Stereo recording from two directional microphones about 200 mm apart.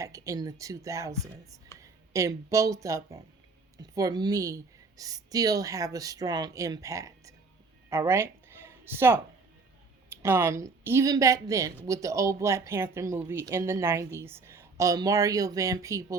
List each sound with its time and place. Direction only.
0.0 s speech: 15° right (ahead or behind)
7.9 s a sound: 15° right (ahead or behind)
10.2 s speech: 15° right (ahead or behind)